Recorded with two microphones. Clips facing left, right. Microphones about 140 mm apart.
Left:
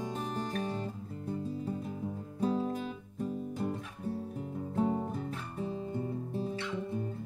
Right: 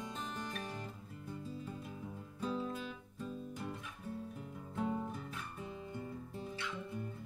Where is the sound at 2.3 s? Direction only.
35° left (ahead or behind).